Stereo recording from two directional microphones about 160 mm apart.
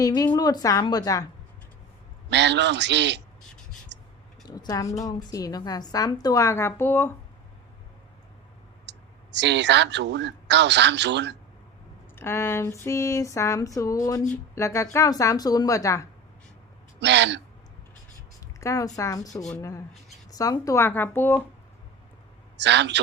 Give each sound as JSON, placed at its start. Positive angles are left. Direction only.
{"t": 0.0, "sound": "a woman's voice", "side_deg": 20}
{"t": 2.3, "sound": "a man's voice", "side_deg": -90}
{"t": 3.9, "sound": "a sound", "side_deg": -90}
{"t": 4.4, "sound": "a woman's voice", "side_deg": 25}
{"t": 8.9, "sound": "speech", "side_deg": -90}
{"t": 12.1, "sound": "a sound", "side_deg": 15}
{"t": 14.3, "sound": "a woman's voice", "side_deg": 15}
{"t": 17.0, "sound": "a man's voice", "side_deg": -90}
{"t": 18.6, "sound": "a woman's voice", "side_deg": 20}
{"t": 20.3, "sound": "a sound", "side_deg": 20}
{"t": 22.5, "sound": "a man's voice", "side_deg": -90}